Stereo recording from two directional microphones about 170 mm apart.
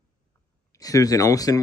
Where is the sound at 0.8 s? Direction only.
20° left (ahead or behind).